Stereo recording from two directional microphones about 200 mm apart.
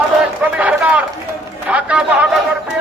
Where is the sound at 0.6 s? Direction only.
5° right (ahead or behind).